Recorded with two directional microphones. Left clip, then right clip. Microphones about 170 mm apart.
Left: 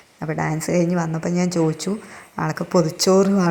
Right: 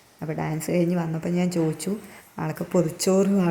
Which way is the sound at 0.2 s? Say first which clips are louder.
Left 6 dB; 15° left (ahead or behind).